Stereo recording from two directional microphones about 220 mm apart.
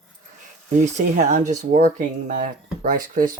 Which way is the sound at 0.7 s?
35° right (ahead or behind).